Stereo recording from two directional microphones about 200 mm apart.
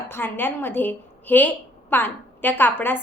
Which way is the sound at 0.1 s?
10° left (ahead or behind).